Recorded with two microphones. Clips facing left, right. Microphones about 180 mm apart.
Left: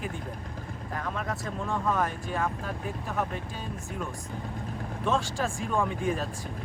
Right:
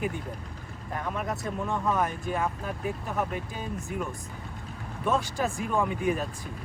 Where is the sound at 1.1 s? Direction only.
20° right (ahead or behind).